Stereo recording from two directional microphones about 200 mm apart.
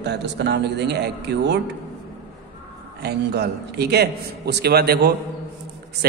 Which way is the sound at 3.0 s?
55° right (ahead or behind).